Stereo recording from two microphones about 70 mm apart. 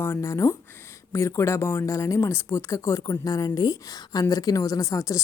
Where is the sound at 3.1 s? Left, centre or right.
Left.